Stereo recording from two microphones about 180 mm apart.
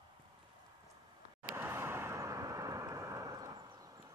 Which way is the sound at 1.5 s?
15° right (ahead or behind).